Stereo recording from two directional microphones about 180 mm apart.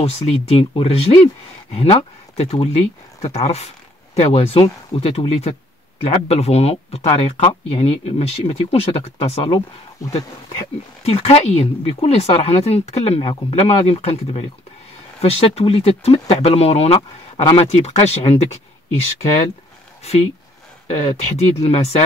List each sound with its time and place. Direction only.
0.0 s speech: 35° left (ahead or behind)
11.1 s speech: 35° left (ahead or behind)
20.0 s speech: 35° left (ahead or behind)